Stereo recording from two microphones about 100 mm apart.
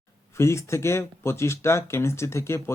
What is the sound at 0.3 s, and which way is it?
Speech, 30° left (ahead or behind).